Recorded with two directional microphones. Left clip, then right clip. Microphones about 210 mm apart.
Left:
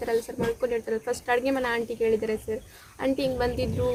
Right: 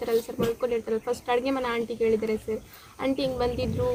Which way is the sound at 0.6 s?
5° left (ahead or behind).